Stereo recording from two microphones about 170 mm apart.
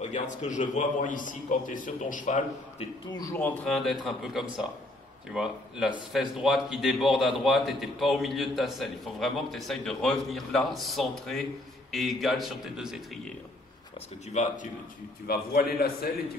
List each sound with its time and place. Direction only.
0.0 s a man's voice: 45° left (ahead or behind)
3.1 s speech: 20° left (ahead or behind)
3.3 s a man's voice: 10° left (ahead or behind)
14.3 s a man's voice: 50° left (ahead or behind)
15.2 s a man's voice: 65° left (ahead or behind)